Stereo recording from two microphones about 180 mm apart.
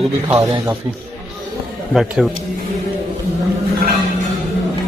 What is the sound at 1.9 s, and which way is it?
Speech, centre (ahead or behind).